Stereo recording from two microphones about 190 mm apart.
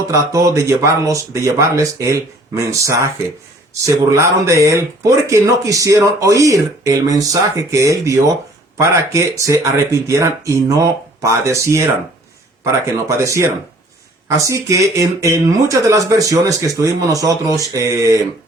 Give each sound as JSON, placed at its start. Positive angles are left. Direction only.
{"t": 0.1, "sound": "speech", "side_deg": -15}